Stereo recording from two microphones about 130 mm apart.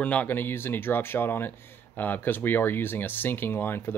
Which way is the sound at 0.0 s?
10° left (ahead or behind).